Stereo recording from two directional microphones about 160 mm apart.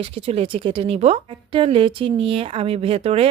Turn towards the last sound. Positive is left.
turn(degrees=-40)  # may be behind; listen again after turning